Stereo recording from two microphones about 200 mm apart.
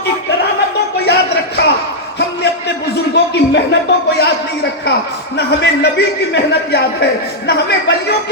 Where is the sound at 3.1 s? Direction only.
60° left (ahead or behind).